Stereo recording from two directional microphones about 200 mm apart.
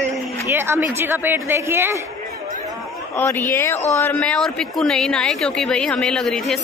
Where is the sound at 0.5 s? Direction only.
10° right (ahead or behind).